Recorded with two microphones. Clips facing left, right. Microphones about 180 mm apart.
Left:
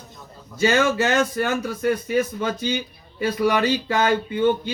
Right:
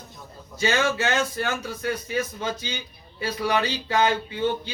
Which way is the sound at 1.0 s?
50° left (ahead or behind).